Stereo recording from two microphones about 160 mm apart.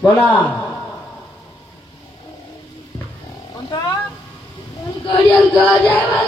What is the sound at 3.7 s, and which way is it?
Speech, 25° left (ahead or behind).